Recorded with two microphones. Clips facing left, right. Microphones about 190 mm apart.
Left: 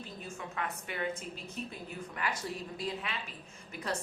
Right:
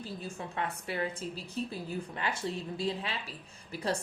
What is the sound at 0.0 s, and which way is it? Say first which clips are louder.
A woman's voice: right 3 dB; 30° right (ahead or behind).